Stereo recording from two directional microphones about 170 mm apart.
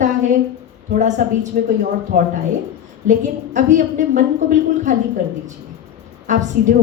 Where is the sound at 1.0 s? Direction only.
45° right (ahead or behind).